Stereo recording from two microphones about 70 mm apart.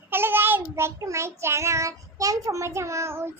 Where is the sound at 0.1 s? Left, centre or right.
Right.